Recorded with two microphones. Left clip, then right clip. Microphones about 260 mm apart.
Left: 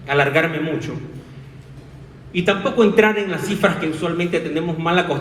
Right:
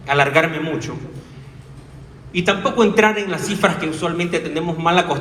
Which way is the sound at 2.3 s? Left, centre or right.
Centre.